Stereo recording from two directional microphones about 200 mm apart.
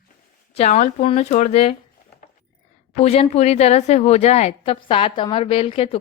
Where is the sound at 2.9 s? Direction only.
30° left (ahead or behind).